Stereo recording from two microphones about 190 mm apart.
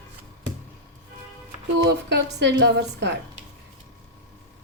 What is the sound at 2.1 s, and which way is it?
A woman's voice, 65° right (ahead or behind).